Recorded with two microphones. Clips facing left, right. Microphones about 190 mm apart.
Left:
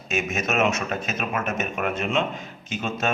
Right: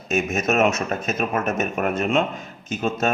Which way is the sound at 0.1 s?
45° right (ahead or behind).